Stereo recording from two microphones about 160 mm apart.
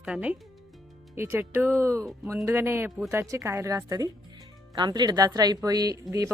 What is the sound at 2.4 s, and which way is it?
Speech, 15° right (ahead or behind).